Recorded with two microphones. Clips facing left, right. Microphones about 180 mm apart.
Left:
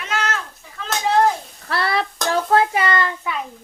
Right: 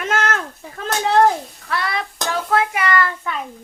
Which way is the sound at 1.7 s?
35° left (ahead or behind).